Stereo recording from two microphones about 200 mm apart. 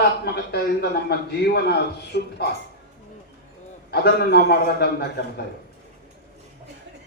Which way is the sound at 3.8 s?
55° left (ahead or behind).